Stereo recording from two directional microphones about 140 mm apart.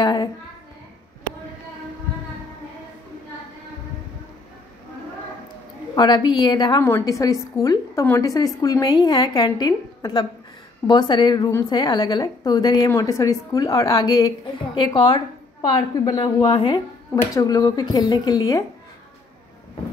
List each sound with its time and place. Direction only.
0.0 s child singing: 30° left (ahead or behind)
5.9 s a woman's voice: 30° left (ahead or behind)
6.8 s a woman's voice: 20° left (ahead or behind)